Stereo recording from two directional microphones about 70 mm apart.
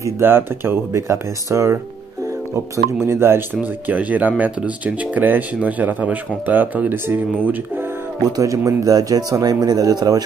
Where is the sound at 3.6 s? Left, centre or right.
Right.